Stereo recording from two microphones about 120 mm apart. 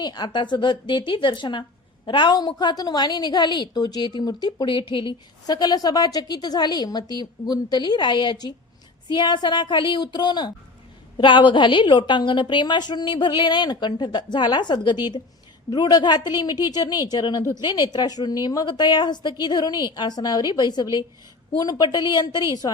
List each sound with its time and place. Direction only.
0.0 s a woman's voice: 35° left (ahead or behind)